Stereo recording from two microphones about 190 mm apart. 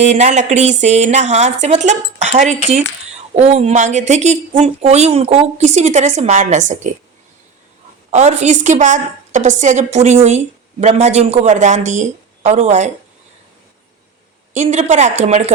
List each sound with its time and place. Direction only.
0.0 s a woman's voice: 35° right (ahead or behind)
8.1 s a woman's voice: 35° right (ahead or behind)
14.5 s a woman's voice: 40° right (ahead or behind)